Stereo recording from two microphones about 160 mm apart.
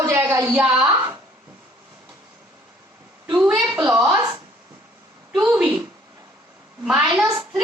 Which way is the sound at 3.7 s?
15° right (ahead or behind).